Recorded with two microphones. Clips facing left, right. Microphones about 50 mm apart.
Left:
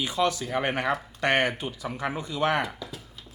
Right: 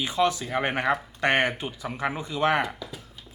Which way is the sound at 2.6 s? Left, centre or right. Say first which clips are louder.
Right 2 dB; centre.